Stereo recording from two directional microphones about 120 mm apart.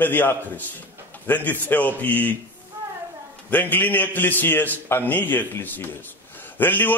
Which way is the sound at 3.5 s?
15° left (ahead or behind).